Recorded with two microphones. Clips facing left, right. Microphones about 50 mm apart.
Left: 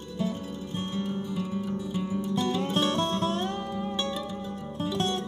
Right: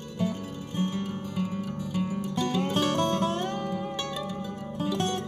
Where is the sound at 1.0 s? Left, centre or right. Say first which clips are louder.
Left 1 dB; right.